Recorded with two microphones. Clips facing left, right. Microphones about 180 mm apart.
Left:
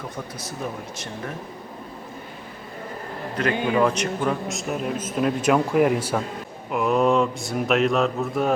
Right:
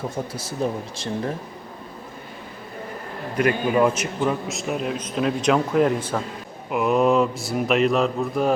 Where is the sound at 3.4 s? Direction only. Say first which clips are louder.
Right 2 dB; 10° right (ahead or behind); by 6.2 s 10° left (ahead or behind).